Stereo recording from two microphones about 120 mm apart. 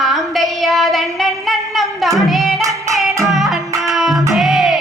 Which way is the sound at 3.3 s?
Centre (ahead or behind).